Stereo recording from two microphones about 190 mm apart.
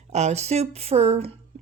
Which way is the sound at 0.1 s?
35° right (ahead or behind).